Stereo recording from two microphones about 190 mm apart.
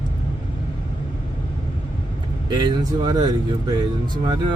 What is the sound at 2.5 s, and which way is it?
Speech, 25° right (ahead or behind).